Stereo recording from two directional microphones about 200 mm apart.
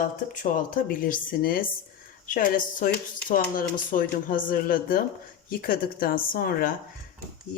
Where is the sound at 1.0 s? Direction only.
45° left (ahead or behind).